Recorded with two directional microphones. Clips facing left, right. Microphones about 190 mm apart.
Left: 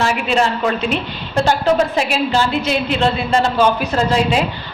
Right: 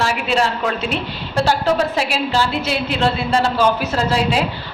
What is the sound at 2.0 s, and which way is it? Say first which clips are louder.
A woman's voice: left 2 dB; 5° right (ahead or behind).